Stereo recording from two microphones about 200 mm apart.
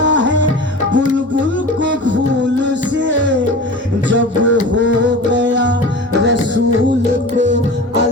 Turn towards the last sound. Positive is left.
turn(degrees=-65)  # may be behind; listen again after turning